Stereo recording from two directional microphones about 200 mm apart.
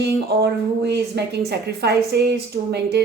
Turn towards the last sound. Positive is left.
turn(degrees=-55)  # may be behind; listen again after turning